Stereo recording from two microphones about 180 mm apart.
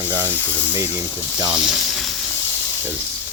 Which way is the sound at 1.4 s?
5° right (ahead or behind).